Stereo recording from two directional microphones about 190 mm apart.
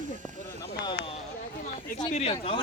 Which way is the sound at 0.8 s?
25° left (ahead or behind).